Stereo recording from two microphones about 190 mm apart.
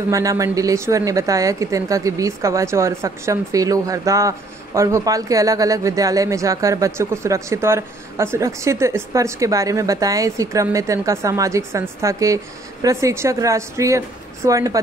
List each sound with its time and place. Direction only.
0.1 s speech: 15° right (ahead or behind)